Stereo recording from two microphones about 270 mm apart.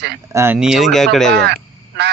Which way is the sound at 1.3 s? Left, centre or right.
Right.